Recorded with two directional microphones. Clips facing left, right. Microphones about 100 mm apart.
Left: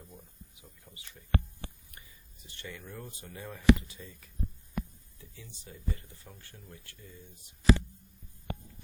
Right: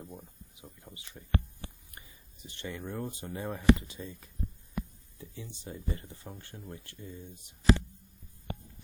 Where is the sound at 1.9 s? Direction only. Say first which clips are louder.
Right 2 dB; 20° right (ahead or behind).